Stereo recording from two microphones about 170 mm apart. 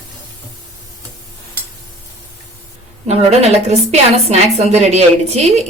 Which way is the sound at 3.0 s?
40° right (ahead or behind).